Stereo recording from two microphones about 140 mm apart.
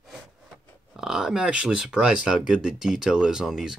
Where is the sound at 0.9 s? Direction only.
5° right (ahead or behind).